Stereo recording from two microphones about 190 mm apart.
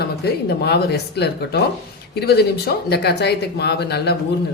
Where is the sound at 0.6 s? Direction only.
60° left (ahead or behind).